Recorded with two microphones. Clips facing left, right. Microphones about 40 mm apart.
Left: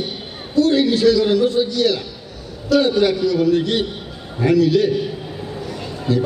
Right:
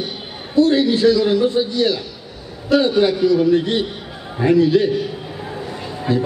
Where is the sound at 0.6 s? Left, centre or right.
Right.